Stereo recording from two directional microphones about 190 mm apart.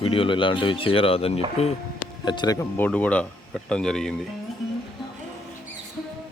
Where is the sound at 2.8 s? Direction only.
10° left (ahead or behind).